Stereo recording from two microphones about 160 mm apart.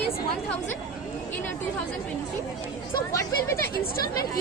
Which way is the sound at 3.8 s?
70° left (ahead or behind).